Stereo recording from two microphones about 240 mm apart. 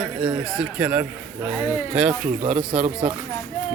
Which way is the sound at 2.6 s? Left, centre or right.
Centre.